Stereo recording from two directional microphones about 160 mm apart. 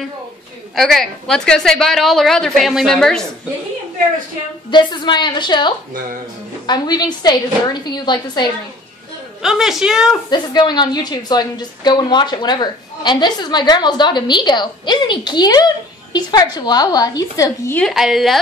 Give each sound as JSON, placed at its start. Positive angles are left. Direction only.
{"t": 0.7, "sound": "a woman's voice", "side_deg": 0}
{"t": 4.6, "sound": "a woman's voice", "side_deg": 30}
{"t": 9.4, "sound": "a woman's voice", "side_deg": -5}
{"t": 10.3, "sound": "a woman's voice", "side_deg": 25}
{"t": 17.7, "sound": "a woman's voice", "side_deg": 0}